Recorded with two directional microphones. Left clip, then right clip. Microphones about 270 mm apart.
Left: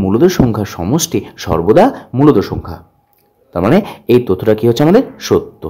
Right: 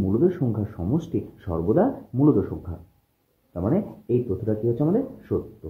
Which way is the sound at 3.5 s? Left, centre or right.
Left.